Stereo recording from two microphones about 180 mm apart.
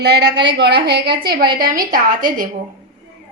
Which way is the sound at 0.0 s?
65° right (ahead or behind).